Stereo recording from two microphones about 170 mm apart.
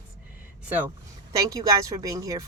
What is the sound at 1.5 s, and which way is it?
Speech, 20° right (ahead or behind).